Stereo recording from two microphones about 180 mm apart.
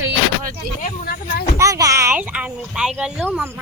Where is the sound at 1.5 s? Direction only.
15° right (ahead or behind).